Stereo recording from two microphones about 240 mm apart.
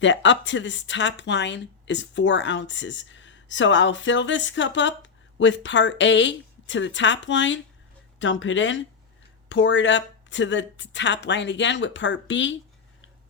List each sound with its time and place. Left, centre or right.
0.0 s speech: left